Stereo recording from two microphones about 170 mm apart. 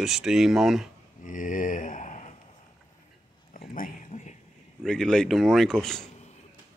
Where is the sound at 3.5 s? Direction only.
55° left (ahead or behind).